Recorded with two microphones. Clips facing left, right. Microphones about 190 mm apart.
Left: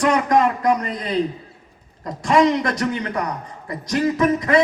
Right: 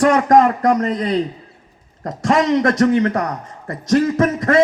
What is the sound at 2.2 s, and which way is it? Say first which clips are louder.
A man's voice: right 2 dB; 45° right (ahead or behind).